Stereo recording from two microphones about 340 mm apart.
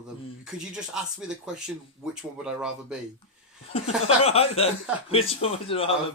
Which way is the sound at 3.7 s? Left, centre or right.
Centre.